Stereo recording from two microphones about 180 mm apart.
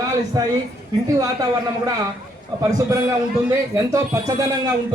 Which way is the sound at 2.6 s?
20° right (ahead or behind).